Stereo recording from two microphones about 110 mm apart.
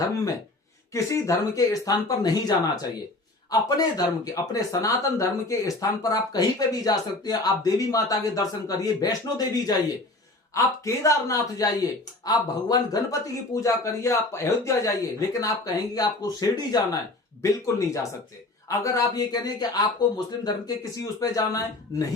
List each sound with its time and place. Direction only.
0.9 s speech: 30° left (ahead or behind)